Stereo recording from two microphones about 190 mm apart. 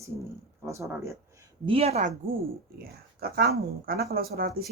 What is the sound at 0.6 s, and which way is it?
Speech, 15° right (ahead or behind).